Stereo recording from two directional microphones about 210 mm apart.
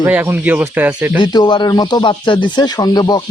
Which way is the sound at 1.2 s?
25° left (ahead or behind).